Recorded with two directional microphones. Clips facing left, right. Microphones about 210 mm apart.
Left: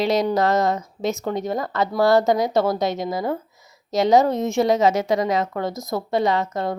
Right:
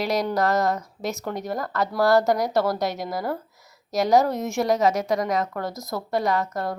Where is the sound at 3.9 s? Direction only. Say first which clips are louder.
Left 3 dB; 20° left (ahead or behind).